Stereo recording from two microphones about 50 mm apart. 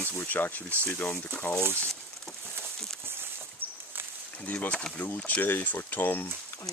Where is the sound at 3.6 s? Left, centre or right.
Right.